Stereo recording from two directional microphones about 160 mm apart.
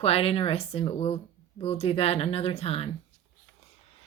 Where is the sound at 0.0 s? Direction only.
40° left (ahead or behind).